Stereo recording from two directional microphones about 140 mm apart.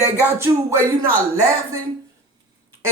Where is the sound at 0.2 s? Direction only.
15° right (ahead or behind).